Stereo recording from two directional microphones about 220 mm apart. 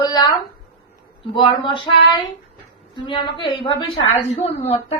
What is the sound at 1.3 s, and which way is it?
Speech, 25° left (ahead or behind).